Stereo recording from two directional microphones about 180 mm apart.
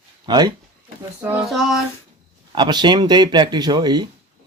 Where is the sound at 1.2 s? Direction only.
Centre (ahead or behind).